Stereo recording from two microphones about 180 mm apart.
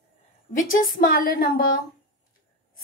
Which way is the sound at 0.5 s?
50° left (ahead or behind).